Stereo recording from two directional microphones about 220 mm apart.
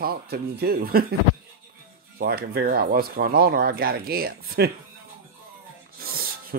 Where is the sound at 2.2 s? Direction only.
45° right (ahead or behind).